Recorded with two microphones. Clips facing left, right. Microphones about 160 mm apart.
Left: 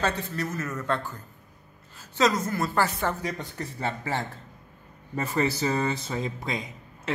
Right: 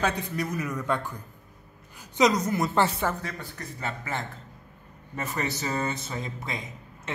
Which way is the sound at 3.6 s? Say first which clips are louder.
Left 4 dB; 30° left (ahead or behind).